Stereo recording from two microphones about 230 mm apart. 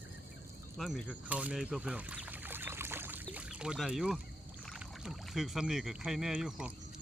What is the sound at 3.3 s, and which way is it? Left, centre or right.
Speech, centre.